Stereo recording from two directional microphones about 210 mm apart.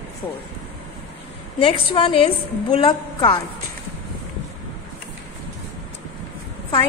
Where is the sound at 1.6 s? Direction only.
25° left (ahead or behind).